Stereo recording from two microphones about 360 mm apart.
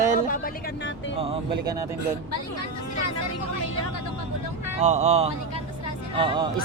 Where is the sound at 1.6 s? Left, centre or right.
Centre.